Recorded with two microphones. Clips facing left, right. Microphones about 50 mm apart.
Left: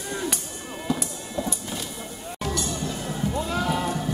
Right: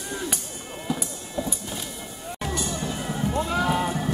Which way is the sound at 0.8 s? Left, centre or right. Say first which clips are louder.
Left 2 dB; centre.